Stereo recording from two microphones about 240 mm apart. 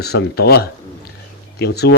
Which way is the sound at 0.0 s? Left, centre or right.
Left.